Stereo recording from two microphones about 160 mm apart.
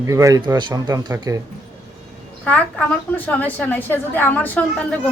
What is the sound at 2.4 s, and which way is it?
A woman's voice, 10° left (ahead or behind).